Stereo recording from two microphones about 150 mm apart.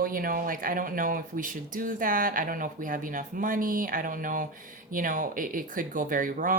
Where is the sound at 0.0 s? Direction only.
70° right (ahead or behind).